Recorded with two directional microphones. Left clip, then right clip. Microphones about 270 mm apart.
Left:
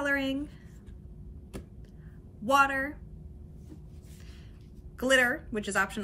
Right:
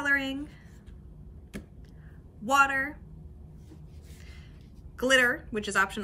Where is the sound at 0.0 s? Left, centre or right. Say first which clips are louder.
Right 2 dB; centre.